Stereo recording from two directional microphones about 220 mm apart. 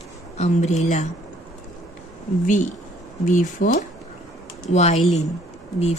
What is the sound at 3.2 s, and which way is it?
A woman's voice, 35° left (ahead or behind).